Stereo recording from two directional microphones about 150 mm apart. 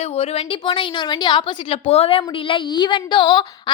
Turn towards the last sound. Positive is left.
turn(degrees=30)  # may be behind; listen again after turning